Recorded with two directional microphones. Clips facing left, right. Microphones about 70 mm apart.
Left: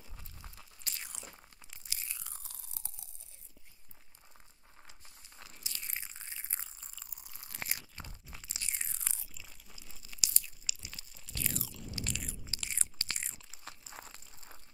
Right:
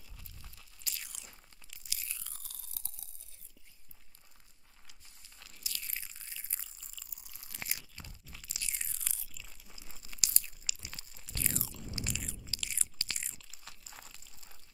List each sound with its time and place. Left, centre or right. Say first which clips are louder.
0.4 s crunch: left 4 dB; left
5.4 s a sound: even; left
9.8 s crunch: even; right
12.0 s biting: even; centre
12.4 s crunch: left 1 dB; left